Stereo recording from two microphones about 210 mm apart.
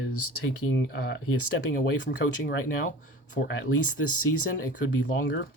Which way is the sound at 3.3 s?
60° left (ahead or behind).